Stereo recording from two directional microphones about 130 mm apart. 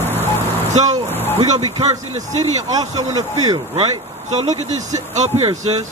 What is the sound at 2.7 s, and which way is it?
Speech, 30° right (ahead or behind).